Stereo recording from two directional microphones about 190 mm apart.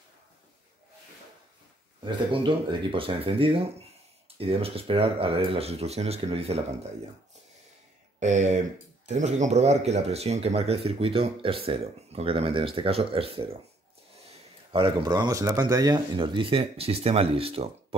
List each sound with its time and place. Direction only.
2.0 s speech: 25° right (ahead or behind)
8.2 s speech: 40° right (ahead or behind)
14.7 s speech: 25° right (ahead or behind)